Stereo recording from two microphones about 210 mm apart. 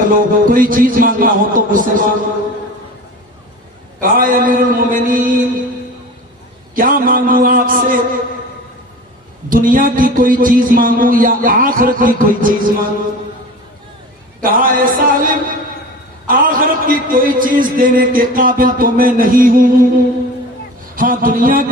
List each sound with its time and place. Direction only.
0.1 s a man's voice: 40° right (ahead or behind)
4.0 s a man's voice: 40° right (ahead or behind)
6.7 s a sound: 40° right (ahead or behind)
9.5 s a man's voice: 40° right (ahead or behind)
14.4 s a man's voice: 40° right (ahead or behind)
20.9 s a man's voice: 40° right (ahead or behind)